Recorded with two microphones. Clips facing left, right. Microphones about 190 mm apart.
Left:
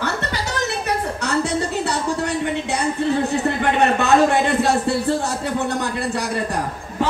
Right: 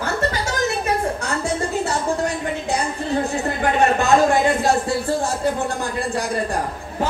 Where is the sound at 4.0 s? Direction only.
65° left (ahead or behind).